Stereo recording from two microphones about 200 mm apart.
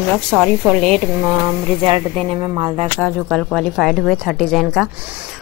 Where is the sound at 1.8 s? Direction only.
30° right (ahead or behind).